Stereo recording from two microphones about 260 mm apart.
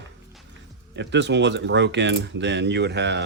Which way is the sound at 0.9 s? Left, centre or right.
Right.